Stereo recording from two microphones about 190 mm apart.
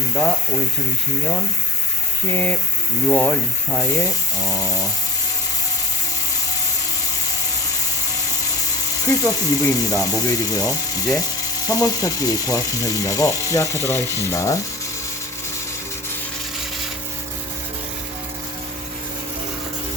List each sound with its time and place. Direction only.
2.3 s ratchet: 10° left (ahead or behind)
9.0 s ratchet: 15° left (ahead or behind)